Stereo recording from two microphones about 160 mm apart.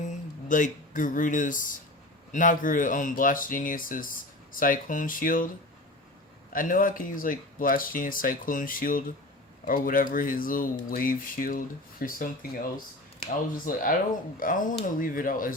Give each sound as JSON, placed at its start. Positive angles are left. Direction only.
{"t": 0.0, "sound": "speech", "side_deg": 50}
{"t": 6.5, "sound": "speech", "side_deg": 60}